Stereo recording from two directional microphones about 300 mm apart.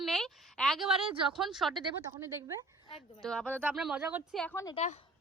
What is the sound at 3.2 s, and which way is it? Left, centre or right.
Speech, centre.